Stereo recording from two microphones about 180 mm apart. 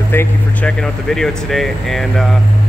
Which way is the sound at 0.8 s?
Centre (ahead or behind).